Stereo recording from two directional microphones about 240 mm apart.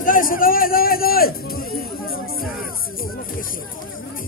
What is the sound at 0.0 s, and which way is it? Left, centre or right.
Music, left.